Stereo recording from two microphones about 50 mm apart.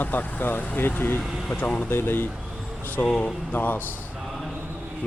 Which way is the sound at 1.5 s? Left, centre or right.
Left.